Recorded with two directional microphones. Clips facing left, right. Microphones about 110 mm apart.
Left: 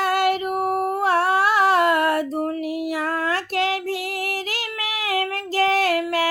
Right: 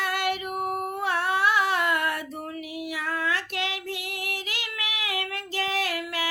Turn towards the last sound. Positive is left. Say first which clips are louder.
# left 9 dB
turn(degrees=45)  # may be behind; listen again after turning